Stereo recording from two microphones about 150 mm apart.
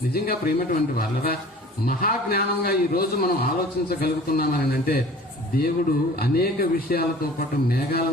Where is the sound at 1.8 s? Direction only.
85° left.